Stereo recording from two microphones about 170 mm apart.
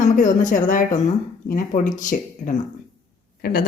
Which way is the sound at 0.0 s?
50° left (ahead or behind).